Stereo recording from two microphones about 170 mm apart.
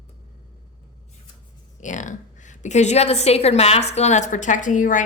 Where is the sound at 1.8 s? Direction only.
45° left (ahead or behind).